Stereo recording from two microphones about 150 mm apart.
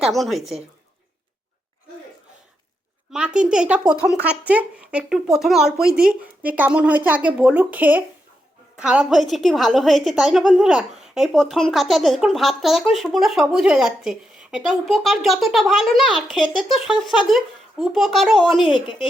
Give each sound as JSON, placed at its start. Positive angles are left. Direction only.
{"t": 0.0, "sound": "a woman's voice", "side_deg": 0}
{"t": 3.1, "sound": "a woman's voice", "side_deg": -5}